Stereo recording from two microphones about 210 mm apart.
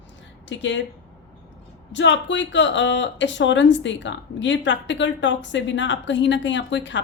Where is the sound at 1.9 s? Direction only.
60° left (ahead or behind).